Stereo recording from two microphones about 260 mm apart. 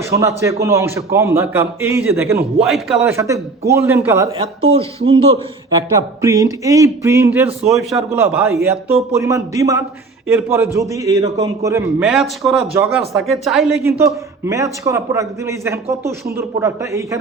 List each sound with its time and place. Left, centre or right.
0.0 s a man's voice: centre
4.3 s a man's voice: right